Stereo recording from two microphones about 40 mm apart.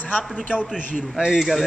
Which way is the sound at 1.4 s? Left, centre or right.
Centre.